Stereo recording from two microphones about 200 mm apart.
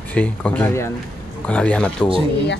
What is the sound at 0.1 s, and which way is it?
Speech, 5° left (ahead or behind).